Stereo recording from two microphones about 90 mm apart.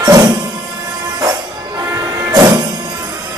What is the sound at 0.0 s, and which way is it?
Music, 45° right (ahead or behind).